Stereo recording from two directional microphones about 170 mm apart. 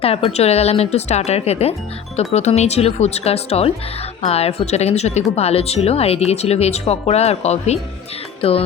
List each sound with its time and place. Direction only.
0.0 s speech: 35° left (ahead or behind)